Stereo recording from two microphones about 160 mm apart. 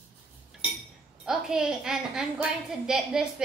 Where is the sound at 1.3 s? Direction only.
5° right (ahead or behind).